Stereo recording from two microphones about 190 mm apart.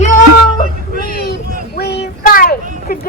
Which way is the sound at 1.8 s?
60° left (ahead or behind).